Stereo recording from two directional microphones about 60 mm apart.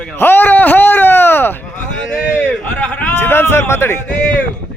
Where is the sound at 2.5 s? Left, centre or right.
Centre.